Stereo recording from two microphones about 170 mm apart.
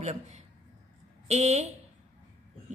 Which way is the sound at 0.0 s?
40° right (ahead or behind).